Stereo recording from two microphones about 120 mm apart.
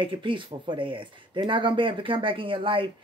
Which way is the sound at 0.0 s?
45° right (ahead or behind).